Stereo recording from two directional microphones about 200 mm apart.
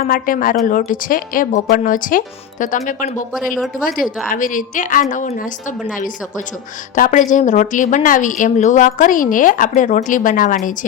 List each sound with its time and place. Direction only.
0.0 s a woman's voice: 45° left (ahead or behind)